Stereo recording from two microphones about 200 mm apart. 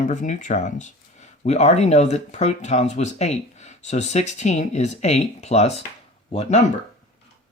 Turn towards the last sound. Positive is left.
turn(degrees=30)  # may be behind; listen again after turning